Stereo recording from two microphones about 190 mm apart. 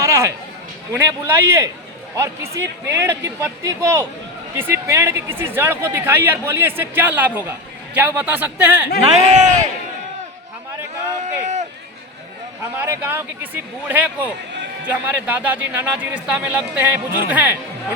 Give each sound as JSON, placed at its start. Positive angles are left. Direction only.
{"t": 0.0, "sound": "a sound", "side_deg": -15}
{"t": 0.9, "sound": "speech", "side_deg": -15}
{"t": 9.3, "sound": "speech", "side_deg": -40}
{"t": 11.2, "sound": "speech", "side_deg": -40}
{"t": 12.7, "sound": "speech", "side_deg": -10}